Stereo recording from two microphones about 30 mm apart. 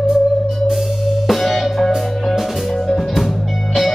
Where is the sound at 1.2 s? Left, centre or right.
Centre.